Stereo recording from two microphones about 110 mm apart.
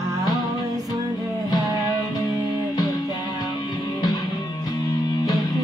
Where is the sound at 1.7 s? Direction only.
35° left (ahead or behind).